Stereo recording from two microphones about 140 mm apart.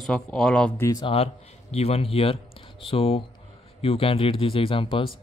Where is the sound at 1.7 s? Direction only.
45° left (ahead or behind).